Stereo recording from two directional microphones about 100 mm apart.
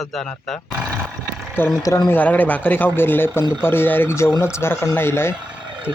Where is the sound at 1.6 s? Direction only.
20° left (ahead or behind).